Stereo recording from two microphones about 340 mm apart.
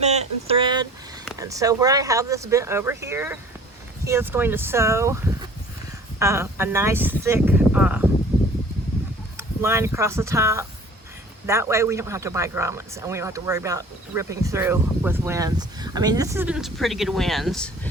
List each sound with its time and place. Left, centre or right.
0.0 s a sound: centre
1.4 s speech: centre
9.6 s speech: centre